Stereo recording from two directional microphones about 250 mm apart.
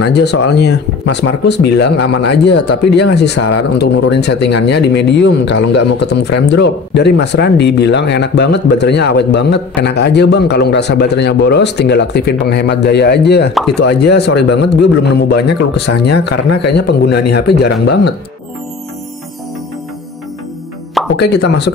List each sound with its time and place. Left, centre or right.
0.0 s speech: left
21.2 s speech: left